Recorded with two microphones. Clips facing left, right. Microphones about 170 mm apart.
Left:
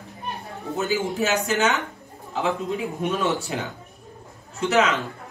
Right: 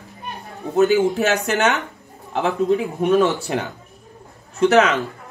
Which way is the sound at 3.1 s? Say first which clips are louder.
Right 7 dB; 65° right (ahead or behind).